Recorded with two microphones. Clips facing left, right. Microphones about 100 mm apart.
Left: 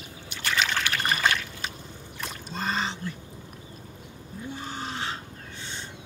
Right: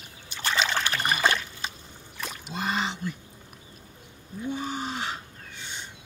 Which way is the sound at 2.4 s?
10° right (ahead or behind).